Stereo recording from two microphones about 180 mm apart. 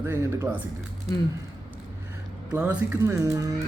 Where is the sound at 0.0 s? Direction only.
15° right (ahead or behind).